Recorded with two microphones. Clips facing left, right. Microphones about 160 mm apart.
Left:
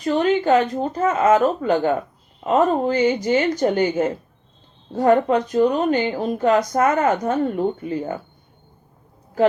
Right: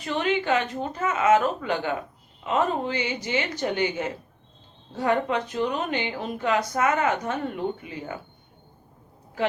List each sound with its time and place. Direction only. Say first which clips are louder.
0.0 s speech: left 7 dB; 40° left (ahead or behind)